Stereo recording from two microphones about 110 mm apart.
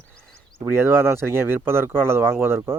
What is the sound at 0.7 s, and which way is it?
Speech, 20° right (ahead or behind).